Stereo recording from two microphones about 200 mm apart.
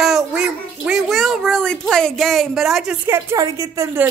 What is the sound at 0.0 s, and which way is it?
A child's voice, 5° right (ahead or behind).